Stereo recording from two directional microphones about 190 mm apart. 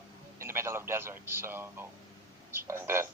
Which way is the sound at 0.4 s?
15° right (ahead or behind).